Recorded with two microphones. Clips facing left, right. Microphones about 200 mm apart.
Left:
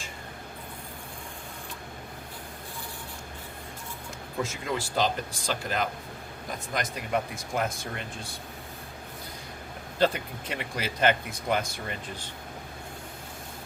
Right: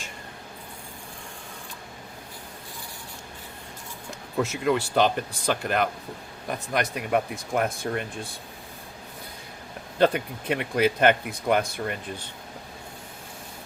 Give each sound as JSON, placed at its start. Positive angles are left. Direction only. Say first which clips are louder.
{"t": 4.4, "sound": "speech", "louder": "right 8 dB", "side_deg": -65}
{"t": 10.0, "sound": "speech", "louder": "right 4 dB", "side_deg": -55}